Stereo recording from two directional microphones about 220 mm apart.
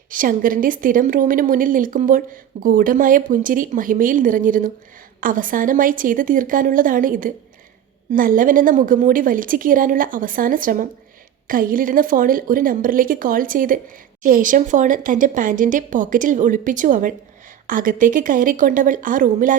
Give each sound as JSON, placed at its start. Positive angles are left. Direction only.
{"t": 0.1, "sound": "a woman's voice", "side_deg": -40}